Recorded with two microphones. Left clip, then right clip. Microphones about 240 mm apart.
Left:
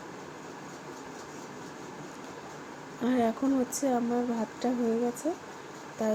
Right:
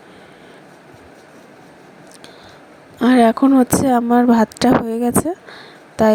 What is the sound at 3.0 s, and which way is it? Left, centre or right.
Speech, right.